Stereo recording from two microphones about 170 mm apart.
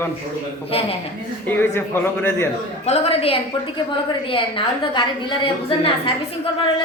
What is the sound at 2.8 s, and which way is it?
A woman's voice, 40° left (ahead or behind).